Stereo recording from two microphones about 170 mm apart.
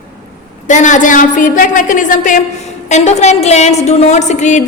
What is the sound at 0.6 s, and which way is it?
A woman's voice, 45° left (ahead or behind).